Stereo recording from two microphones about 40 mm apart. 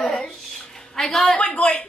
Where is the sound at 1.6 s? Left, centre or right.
Left.